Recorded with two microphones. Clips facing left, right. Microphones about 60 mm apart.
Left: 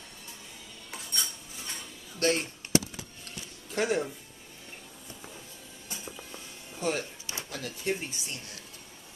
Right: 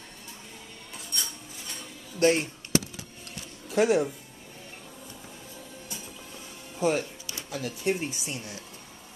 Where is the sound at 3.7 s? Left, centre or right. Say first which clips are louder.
Right 6 dB; centre.